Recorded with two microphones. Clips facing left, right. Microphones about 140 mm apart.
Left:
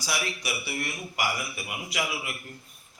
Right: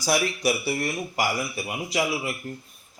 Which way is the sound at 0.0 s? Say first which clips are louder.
Right 9 dB; 45° right (ahead or behind).